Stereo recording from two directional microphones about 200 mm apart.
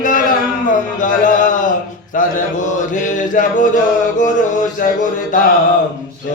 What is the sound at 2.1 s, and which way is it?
Mantra, 40° left (ahead or behind).